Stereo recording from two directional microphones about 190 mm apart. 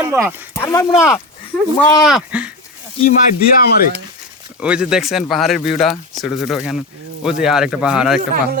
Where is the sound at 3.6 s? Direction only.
55° left (ahead or behind).